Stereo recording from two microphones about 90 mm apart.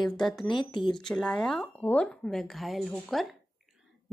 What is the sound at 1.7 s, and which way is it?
Speech, 15° left (ahead or behind).